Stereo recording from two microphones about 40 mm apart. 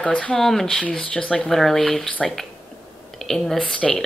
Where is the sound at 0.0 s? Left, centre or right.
Left.